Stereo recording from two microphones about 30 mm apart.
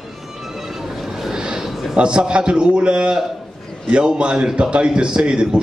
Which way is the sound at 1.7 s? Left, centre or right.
Centre.